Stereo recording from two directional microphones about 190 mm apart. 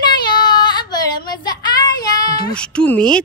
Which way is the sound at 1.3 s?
20° left (ahead or behind).